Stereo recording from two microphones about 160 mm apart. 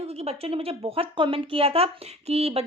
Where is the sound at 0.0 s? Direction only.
40° right (ahead or behind).